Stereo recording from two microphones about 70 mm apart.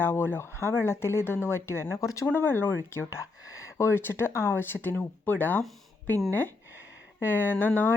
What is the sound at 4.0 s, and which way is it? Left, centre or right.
Speech, left.